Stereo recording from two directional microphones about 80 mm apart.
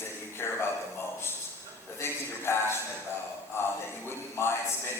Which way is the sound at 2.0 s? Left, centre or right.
Left.